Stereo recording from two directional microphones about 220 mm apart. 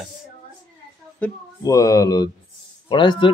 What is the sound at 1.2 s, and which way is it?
Speech, 15° left (ahead or behind).